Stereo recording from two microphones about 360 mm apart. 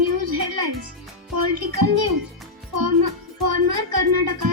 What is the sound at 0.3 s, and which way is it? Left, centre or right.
Music, right.